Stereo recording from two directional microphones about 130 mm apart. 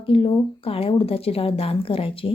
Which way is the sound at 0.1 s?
45° left (ahead or behind).